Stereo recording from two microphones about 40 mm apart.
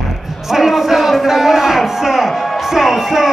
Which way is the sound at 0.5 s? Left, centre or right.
Centre.